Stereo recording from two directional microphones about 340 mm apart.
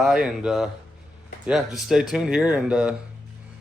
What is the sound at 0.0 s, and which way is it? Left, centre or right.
Speech, centre.